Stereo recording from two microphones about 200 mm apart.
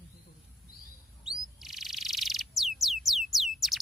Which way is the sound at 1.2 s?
Centre (ahead or behind).